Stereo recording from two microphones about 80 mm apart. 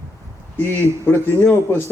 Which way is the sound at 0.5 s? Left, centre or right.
Left.